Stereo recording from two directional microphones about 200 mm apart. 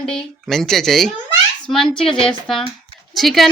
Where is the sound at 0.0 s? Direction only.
Centre (ahead or behind).